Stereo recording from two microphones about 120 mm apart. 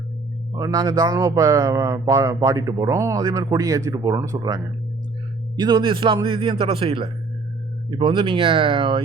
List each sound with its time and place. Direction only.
0.5 s speech: 30° right (ahead or behind); by 9.0 s 50° right (ahead or behind)